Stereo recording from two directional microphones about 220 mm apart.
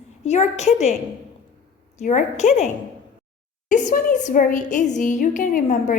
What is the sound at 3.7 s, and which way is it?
A woman's voice, 35° left (ahead or behind).